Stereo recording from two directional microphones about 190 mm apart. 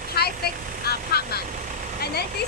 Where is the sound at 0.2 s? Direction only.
55° left (ahead or behind).